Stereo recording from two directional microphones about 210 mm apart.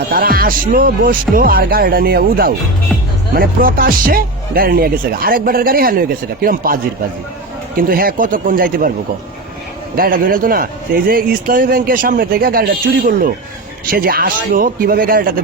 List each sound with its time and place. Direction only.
0.1 s speech: 45° right (ahead or behind)
7.8 s speech: 45° right (ahead or behind)
9.9 s speech: 45° right (ahead or behind)